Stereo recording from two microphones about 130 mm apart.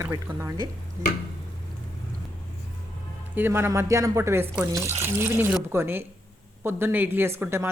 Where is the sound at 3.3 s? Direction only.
15° right (ahead or behind).